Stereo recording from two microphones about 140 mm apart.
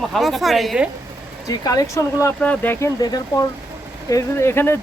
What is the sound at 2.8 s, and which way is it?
Speech, 25° left (ahead or behind).